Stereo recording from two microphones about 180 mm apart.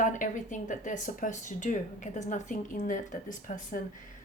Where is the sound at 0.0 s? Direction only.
45° left (ahead or behind).